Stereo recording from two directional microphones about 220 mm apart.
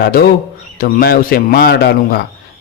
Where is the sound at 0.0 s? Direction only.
45° left (ahead or behind).